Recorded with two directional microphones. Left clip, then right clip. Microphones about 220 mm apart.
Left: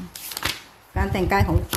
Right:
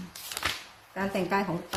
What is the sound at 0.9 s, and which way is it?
Speech, 50° left (ahead or behind).